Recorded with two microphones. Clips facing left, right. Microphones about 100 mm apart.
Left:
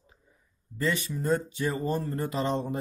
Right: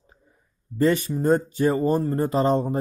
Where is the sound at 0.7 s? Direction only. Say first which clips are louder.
Right 9 dB; 45° right (ahead or behind).